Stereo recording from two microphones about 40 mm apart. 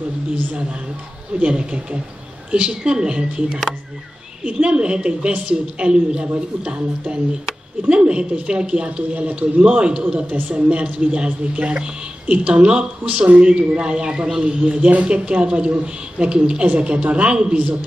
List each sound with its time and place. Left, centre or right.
1.4 s speech: right